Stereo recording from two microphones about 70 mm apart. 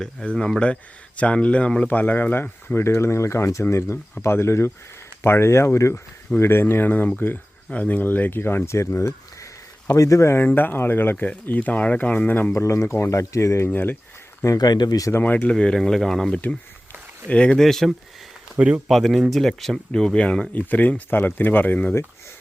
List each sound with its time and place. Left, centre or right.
0.0 s speech: centre
1.9 s speech: left
2.8 s speech: left
10.4 s speech: left
12.5 s speech: left
14.6 s speech: left
15.2 s speech: left
15.5 s speech: centre
20.5 s speech: left